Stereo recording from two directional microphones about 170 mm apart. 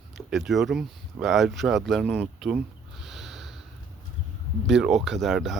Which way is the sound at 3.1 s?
Centre (ahead or behind).